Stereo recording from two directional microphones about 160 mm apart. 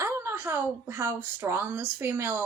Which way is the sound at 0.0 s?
15° right (ahead or behind).